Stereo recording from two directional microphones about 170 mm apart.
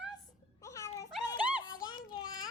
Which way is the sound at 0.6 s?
20° left (ahead or behind).